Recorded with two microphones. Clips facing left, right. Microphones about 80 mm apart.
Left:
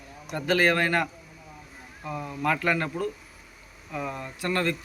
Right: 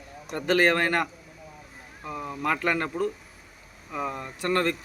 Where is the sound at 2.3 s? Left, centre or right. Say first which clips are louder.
Left 1 dB; right.